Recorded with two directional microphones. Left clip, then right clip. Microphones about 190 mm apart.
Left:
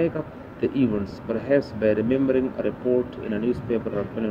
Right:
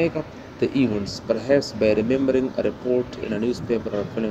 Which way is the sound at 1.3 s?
15° left (ahead or behind).